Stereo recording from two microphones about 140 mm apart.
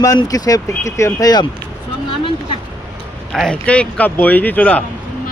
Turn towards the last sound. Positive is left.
turn(degrees=10)  # may be behind; listen again after turning